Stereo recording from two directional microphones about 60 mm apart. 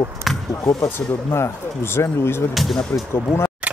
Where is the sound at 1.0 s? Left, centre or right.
Left.